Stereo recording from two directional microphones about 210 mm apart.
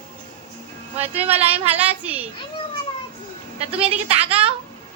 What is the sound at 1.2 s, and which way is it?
Speech, 30° right (ahead or behind).